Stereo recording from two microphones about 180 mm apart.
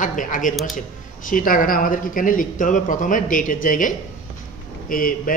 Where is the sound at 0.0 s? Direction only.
45° left (ahead or behind).